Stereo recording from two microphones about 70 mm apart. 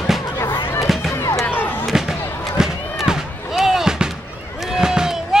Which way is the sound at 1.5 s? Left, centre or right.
Left.